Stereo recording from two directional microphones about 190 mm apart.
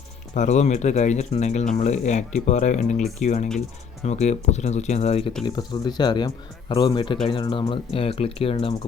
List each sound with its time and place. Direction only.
0.3 s speech: 40° left (ahead or behind)
5.5 s speech: 20° left (ahead or behind)